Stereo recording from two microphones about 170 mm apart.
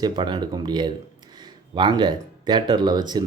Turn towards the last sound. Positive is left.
turn(degrees=-25)  # may be behind; listen again after turning